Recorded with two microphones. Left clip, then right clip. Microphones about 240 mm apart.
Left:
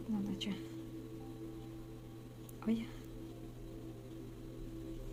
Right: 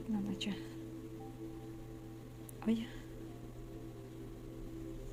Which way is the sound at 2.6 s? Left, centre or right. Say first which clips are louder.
Right 1 dB; right.